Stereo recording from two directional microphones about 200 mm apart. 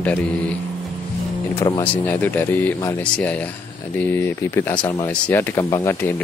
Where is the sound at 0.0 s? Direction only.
5° left (ahead or behind).